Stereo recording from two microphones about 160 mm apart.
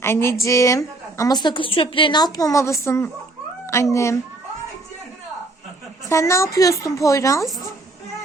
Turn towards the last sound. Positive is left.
turn(degrees=20)  # may be behind; listen again after turning